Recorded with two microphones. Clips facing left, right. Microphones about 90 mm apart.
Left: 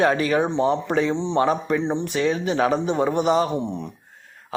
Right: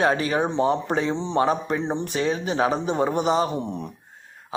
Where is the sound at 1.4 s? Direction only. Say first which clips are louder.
Left 1 dB; 30° right (ahead or behind).